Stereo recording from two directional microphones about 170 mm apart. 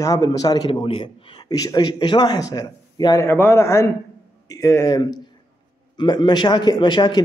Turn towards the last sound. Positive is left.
turn(degrees=25)  # may be behind; listen again after turning